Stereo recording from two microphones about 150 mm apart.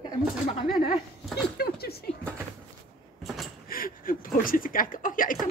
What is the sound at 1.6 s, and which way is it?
Speech, 90° left.